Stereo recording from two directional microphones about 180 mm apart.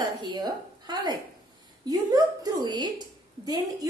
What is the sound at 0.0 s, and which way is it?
A woman's voice, 25° right (ahead or behind).